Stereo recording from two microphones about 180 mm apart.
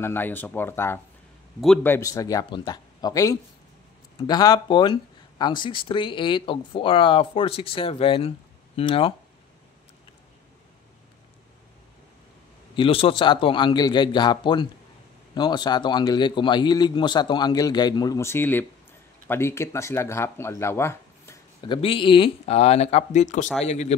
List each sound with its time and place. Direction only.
0.0 s a man's voice: 10° left (ahead or behind); by 9.1 s 30° left (ahead or behind)
12.7 s a man's voice: 30° left (ahead or behind); by 21.4 s 15° left (ahead or behind)
21.6 s speech: 30° left (ahead or behind)